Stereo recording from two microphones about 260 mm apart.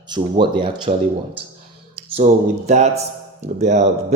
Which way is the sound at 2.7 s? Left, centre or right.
Right.